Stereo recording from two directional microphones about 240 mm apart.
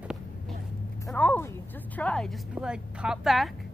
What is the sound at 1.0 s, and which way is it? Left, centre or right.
A woman's voice, centre.